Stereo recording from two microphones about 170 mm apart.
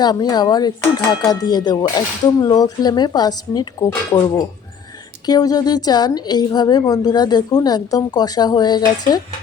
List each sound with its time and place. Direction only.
0.0 s a woman's voice: 25° left (ahead or behind)